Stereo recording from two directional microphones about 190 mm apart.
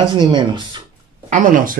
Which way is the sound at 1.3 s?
40° right (ahead or behind).